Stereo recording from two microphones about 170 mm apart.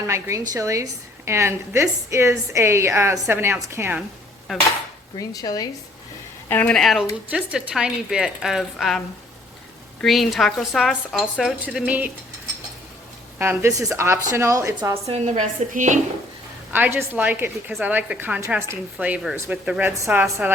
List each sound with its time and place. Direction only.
0.1 s a woman's voice: 15° right (ahead or behind)
5.1 s speech: 20° left (ahead or behind)
6.5 s speech: 10° left (ahead or behind); by 12.1 s 10° right (ahead or behind)
13.4 s a woman's voice: 15° right (ahead or behind)
15.0 s a woman's voice: 40° right (ahead or behind)
16.7 s a woman's voice: 10° right (ahead or behind)